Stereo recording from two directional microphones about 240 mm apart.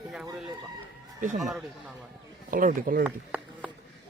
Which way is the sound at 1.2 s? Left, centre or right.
Right.